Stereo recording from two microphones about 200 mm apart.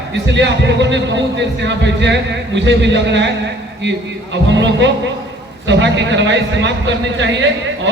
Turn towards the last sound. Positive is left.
turn(degrees=-65)  # may be behind; listen again after turning